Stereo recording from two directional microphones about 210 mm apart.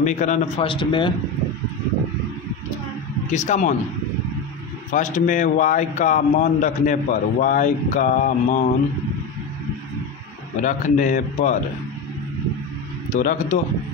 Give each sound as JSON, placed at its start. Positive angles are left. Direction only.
{"t": 0.0, "sound": "a man's voice", "side_deg": 35}
{"t": 3.3, "sound": "a man's voice", "side_deg": 35}
{"t": 4.9, "sound": "a man's voice", "side_deg": 35}
{"t": 10.6, "sound": "a man's voice", "side_deg": 35}
{"t": 13.1, "sound": "a man's voice", "side_deg": 40}